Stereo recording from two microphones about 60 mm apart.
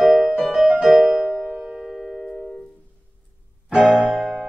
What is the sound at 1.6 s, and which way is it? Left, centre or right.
Music, centre.